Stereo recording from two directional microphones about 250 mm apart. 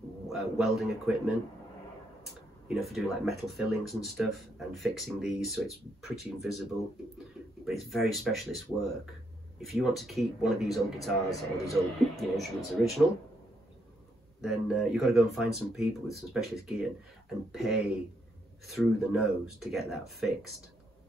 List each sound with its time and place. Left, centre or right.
0.3 s speech: centre
2.7 s speech: centre
7.6 s speech: centre
14.4 s speech: centre